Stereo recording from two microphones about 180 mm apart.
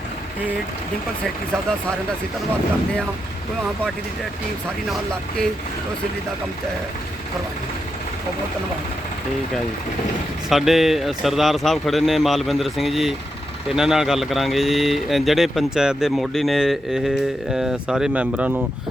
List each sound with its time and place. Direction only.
10.5 s speech: centre (ahead or behind)